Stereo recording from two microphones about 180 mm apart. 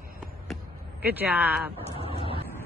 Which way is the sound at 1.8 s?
30° left (ahead or behind).